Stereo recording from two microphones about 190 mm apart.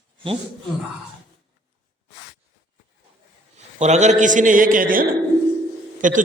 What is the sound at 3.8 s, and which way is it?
A man's voice, 35° right (ahead or behind).